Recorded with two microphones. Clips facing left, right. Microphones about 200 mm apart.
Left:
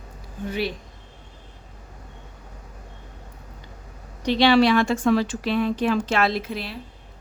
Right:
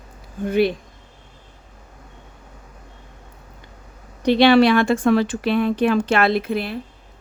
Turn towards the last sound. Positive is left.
turn(degrees=-55)  # may be behind; listen again after turning